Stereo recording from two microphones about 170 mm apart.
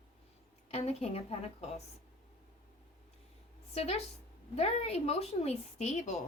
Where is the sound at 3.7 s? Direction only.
40° left (ahead or behind).